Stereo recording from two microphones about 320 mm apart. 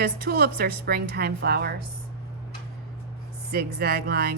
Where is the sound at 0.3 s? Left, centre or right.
Right.